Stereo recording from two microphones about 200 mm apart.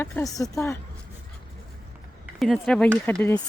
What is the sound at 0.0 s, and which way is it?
Speech, 15° left (ahead or behind).